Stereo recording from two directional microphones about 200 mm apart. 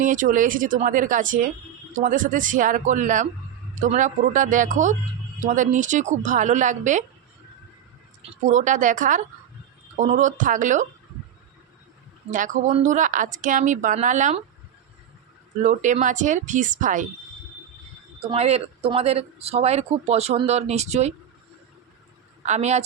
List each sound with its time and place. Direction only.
0.0 s speech: 40° right (ahead or behind)
8.4 s speech: 40° right (ahead or behind)
12.3 s speech: 40° right (ahead or behind)
15.6 s speech: 40° right (ahead or behind)
18.2 s speech: 30° right (ahead or behind)
22.4 s speech: 35° right (ahead or behind)